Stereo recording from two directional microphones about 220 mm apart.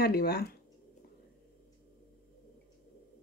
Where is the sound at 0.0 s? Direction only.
45° left (ahead or behind).